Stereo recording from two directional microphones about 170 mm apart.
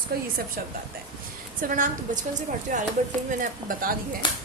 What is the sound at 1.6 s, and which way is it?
A woman's voice, 50° right (ahead or behind).